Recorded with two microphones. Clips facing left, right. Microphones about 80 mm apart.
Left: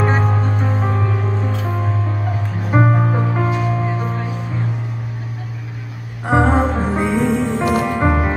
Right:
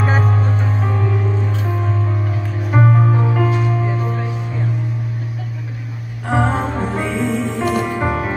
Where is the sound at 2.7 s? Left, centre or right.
Centre.